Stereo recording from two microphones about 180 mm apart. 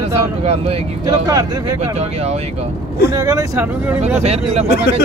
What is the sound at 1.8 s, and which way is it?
Speech, 35° right (ahead or behind).